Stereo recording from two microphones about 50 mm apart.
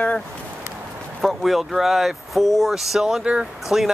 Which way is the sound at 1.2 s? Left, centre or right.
Centre.